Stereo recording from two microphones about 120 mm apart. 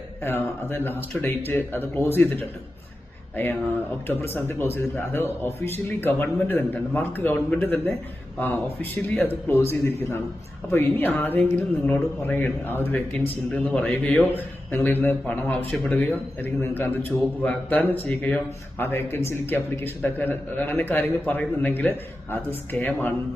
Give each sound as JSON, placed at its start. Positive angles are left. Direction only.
{"t": 0.2, "sound": "a man's voice", "side_deg": 20}